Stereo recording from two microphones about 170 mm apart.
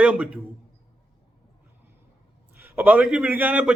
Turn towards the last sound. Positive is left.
turn(degrees=-10)  # may be behind; listen again after turning